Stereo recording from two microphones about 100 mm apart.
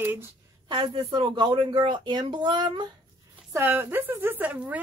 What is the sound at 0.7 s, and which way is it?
Speech, 55° right (ahead or behind).